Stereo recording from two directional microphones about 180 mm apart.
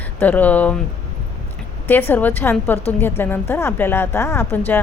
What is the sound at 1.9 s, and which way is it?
A woman's voice, 10° left (ahead or behind).